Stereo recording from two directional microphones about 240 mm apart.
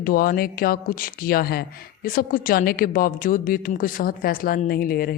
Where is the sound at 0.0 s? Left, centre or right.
Left.